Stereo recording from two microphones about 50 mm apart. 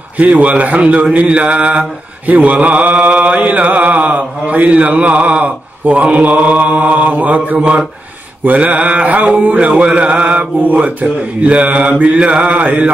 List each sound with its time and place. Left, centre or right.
0.2 s mantra: right